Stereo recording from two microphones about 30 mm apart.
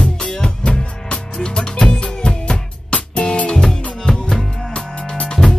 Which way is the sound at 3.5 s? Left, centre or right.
Centre.